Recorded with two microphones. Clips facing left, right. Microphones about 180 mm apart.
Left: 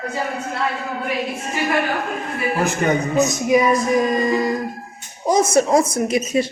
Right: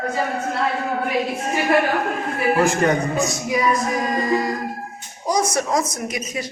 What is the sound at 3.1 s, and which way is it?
Music, 20° left (ahead or behind).